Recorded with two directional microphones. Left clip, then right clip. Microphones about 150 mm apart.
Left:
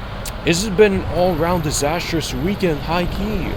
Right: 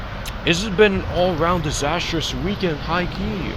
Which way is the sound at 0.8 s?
30° left (ahead or behind).